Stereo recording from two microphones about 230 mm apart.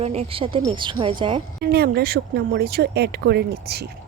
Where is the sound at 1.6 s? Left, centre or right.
Right.